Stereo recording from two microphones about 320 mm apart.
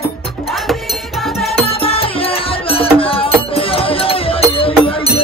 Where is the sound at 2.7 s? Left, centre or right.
Centre.